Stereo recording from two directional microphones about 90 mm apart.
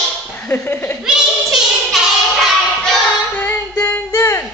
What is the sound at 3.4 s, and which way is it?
Music, 25° left (ahead or behind).